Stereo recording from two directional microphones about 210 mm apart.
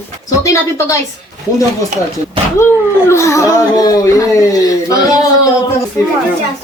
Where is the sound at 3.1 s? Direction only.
15° left (ahead or behind).